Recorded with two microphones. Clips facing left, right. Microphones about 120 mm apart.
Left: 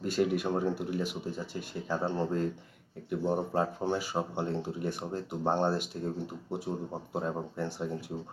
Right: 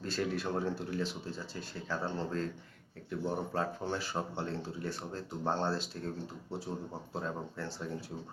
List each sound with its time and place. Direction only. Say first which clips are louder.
0.0 s speech: left 6 dB; 15° left (ahead or behind)